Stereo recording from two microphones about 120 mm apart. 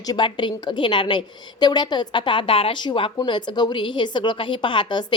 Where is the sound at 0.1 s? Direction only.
40° left (ahead or behind).